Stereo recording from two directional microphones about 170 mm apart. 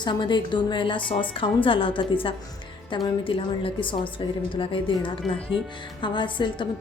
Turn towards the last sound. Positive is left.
turn(degrees=30)  # may be behind; listen again after turning